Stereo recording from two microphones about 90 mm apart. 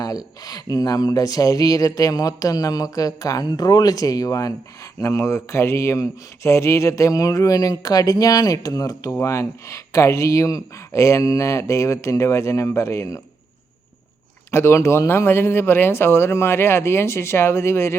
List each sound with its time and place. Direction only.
0.4 s speech: 45° left (ahead or behind)
14.5 s speech: 30° left (ahead or behind)